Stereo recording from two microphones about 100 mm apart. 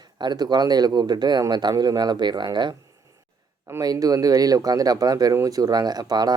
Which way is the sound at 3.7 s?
40° right (ahead or behind).